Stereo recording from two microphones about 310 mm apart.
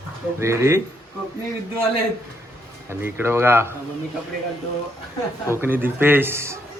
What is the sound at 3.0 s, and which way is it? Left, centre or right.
Speech, centre.